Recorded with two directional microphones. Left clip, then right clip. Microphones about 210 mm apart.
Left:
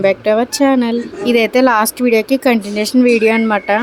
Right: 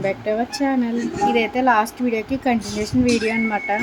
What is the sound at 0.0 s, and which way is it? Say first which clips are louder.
Speech: left 9 dB; 50° left (ahead or behind).